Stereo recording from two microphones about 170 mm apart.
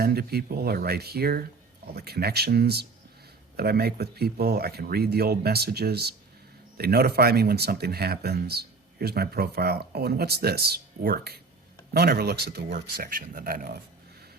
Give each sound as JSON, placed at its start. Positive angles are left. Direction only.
{"t": 0.0, "sound": "speech", "side_deg": -65}
{"t": 12.7, "sound": "speech", "side_deg": -55}